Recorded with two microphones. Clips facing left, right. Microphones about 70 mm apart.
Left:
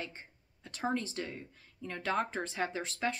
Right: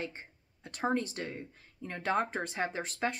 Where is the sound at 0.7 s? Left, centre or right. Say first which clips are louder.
Right 2 dB; right.